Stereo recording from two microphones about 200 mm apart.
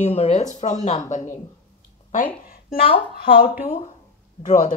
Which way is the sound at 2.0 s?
30° left (ahead or behind).